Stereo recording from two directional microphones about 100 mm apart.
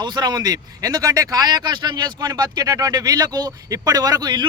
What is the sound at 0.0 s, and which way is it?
Speech, 45° right (ahead or behind).